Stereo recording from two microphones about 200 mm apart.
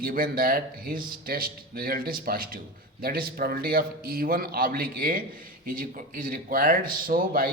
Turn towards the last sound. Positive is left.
turn(degrees=-45)  # may be behind; listen again after turning